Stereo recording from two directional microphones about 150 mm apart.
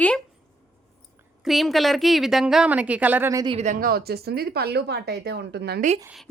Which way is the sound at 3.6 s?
55° right (ahead or behind).